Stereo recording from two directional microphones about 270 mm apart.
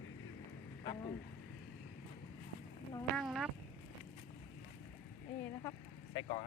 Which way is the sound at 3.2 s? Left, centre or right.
Centre.